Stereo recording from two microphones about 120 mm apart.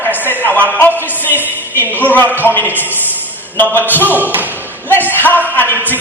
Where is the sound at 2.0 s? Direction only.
15° left (ahead or behind).